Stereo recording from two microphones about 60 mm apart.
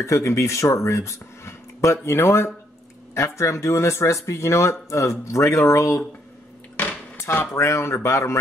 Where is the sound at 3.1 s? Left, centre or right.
Left.